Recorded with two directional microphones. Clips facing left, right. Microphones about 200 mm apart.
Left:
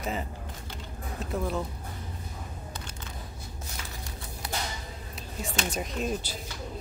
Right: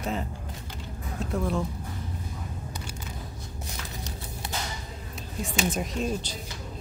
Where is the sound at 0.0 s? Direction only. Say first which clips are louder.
Right 2 dB; centre (ahead or behind).